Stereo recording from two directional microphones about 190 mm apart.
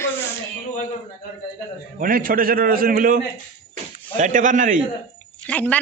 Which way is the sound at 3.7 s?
40° right (ahead or behind).